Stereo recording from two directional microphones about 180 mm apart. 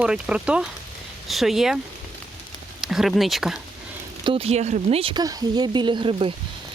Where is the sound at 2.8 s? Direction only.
Centre (ahead or behind).